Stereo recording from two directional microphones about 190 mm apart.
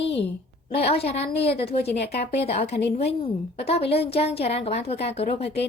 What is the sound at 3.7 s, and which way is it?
A woman's voice, 30° left (ahead or behind).